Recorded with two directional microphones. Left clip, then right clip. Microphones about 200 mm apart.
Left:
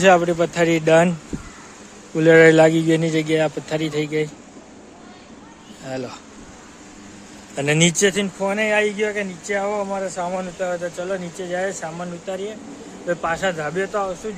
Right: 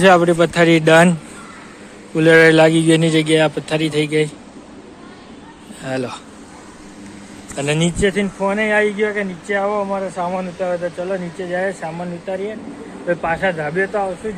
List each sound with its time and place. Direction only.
0.0 s a man's voice: 5° right (ahead or behind)
2.1 s speech: 15° left (ahead or behind)
5.8 s a man's voice: centre (ahead or behind)
7.5 s speech: 30° left (ahead or behind)
8.1 s speech: 15° left (ahead or behind)